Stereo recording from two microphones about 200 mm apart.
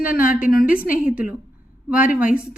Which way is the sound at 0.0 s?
45° left (ahead or behind).